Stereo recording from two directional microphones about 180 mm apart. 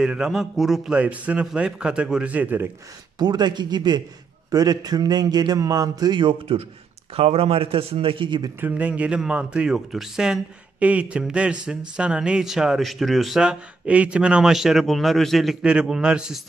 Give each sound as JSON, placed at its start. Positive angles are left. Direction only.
{"t": 0.0, "sound": "speech", "side_deg": -5}
{"t": 3.2, "sound": "a man's voice", "side_deg": -25}
{"t": 8.5, "sound": "speech", "side_deg": -10}